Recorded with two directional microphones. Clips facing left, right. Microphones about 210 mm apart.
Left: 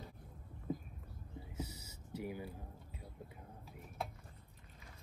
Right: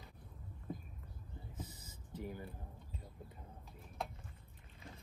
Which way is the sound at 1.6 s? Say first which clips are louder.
Left 6 dB; 50° right (ahead or behind).